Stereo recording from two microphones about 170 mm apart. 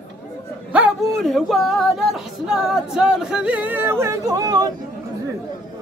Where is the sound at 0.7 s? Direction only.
Centre (ahead or behind); by 4.7 s 25° right (ahead or behind).